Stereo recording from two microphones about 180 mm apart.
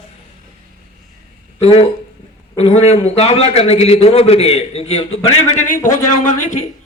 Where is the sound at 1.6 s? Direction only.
30° left (ahead or behind).